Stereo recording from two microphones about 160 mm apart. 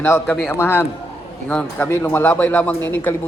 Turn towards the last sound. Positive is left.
turn(degrees=10)  # may be behind; listen again after turning